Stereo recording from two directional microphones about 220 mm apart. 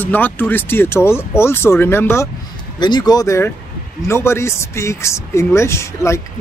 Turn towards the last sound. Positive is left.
turn(degrees=15)  # may be behind; listen again after turning